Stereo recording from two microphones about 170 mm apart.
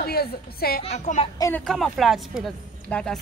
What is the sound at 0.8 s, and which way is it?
Speech, 45° left (ahead or behind).